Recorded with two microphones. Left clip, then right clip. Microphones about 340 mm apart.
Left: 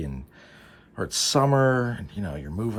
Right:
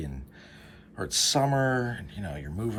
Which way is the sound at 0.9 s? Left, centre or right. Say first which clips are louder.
Left 2 dB; centre.